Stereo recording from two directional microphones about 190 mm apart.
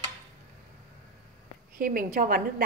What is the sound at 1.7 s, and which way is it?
Speech, 45° right (ahead or behind).